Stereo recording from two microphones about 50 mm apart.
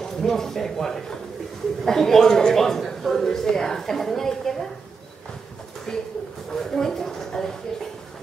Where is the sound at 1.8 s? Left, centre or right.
Centre.